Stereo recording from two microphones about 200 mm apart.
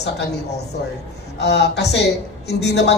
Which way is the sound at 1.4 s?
55° left (ahead or behind).